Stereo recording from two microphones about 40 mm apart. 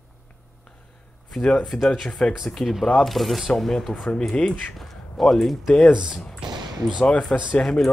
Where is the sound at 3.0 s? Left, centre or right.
Centre.